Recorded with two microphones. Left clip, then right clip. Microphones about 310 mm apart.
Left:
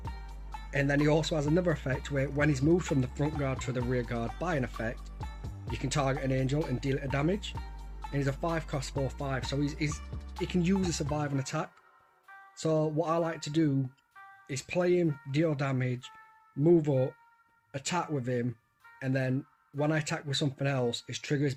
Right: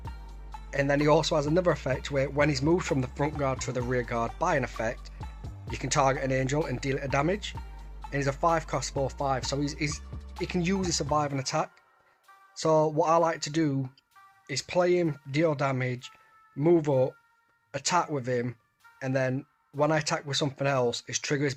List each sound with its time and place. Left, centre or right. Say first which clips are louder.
0.0 s music: left 1 dB; centre
0.7 s speech: right 4 dB; centre
5.2 s music: left 1 dB; centre
5.7 s speech: right 6 dB; centre
7.5 s music: even; centre
8.1 s speech: right 7 dB; centre
9.9 s music: right 2 dB; centre
10.4 s speech: right 2 dB; centre
16.9 s speech: right 4 dB; right
17.7 s speech: right 6 dB; centre